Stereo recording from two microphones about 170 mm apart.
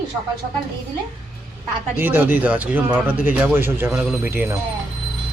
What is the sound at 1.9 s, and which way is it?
Speech, 10° right (ahead or behind).